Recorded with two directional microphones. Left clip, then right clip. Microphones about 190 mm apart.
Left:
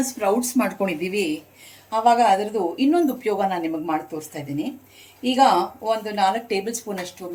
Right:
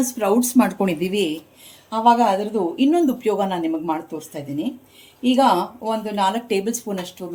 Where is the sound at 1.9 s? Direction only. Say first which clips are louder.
Right 1 dB; 25° right (ahead or behind).